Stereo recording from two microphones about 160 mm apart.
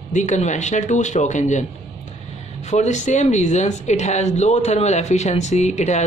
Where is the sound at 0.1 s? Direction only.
50° left (ahead or behind).